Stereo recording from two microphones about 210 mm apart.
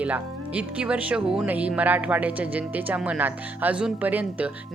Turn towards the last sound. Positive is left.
turn(degrees=-10)  # may be behind; listen again after turning